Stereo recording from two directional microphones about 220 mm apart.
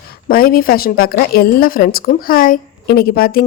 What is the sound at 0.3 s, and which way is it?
A woman's voice, 40° left (ahead or behind).